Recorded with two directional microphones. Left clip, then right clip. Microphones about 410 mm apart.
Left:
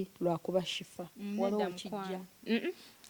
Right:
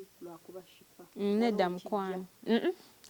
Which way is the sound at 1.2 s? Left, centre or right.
Right.